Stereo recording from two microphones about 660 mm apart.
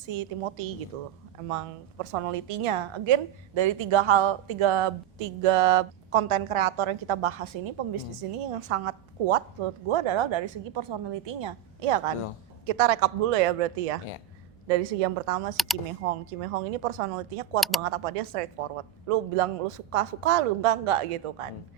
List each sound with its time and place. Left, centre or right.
0.1 s a woman's voice: right
15.5 s speech: centre
16.8 s a woman's voice: right
17.6 s speech: centre
17.8 s a woman's voice: right